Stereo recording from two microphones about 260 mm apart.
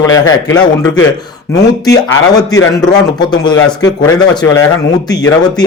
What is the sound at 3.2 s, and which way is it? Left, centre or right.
A man's voice, centre.